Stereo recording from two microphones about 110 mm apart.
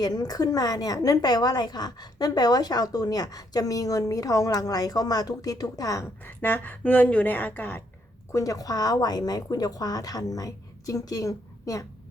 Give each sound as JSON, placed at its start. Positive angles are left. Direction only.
{"t": 0.0, "sound": "a woman's voice", "side_deg": 35}
{"t": 6.2, "sound": "a woman's voice", "side_deg": 20}
{"t": 8.3, "sound": "a woman's voice", "side_deg": 30}